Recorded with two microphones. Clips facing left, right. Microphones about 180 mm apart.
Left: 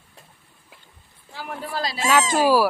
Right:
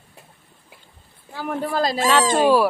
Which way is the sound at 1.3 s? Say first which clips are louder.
Right 7 dB; 45° right (ahead or behind).